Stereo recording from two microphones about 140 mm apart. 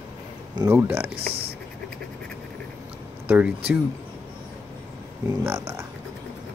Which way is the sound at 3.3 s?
10° right (ahead or behind).